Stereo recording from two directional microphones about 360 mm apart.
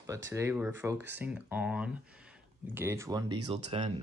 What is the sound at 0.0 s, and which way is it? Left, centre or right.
Speech, centre.